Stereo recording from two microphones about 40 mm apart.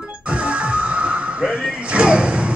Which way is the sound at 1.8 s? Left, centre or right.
Right.